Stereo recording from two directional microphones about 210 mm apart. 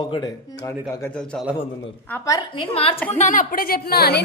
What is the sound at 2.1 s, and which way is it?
A woman's voice, 20° left (ahead or behind).